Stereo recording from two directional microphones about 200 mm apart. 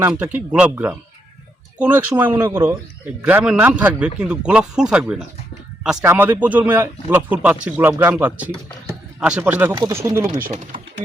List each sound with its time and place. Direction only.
0.0 s a man's voice: 5° right (ahead or behind)
10.4 s speech: 35° right (ahead or behind)